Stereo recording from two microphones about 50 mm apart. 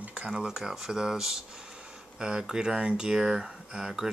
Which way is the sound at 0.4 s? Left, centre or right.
Centre.